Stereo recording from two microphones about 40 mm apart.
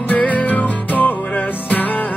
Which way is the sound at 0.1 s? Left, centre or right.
Left.